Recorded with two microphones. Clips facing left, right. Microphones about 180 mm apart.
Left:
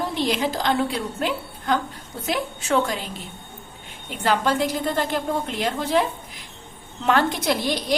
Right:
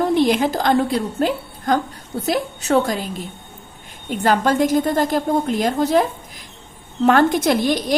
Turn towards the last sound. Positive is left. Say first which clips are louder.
# right 5 dB
turn(degrees=-45)  # may be behind; listen again after turning